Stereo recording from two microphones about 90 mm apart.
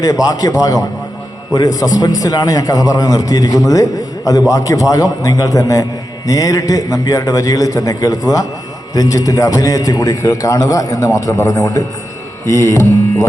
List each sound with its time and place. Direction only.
0.0 s a man's voice: 45° left (ahead or behind)